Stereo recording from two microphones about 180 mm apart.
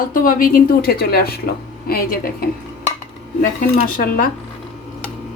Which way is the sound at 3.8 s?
50° left (ahead or behind).